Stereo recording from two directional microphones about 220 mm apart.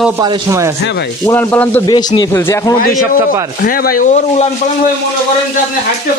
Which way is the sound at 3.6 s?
40° left (ahead or behind).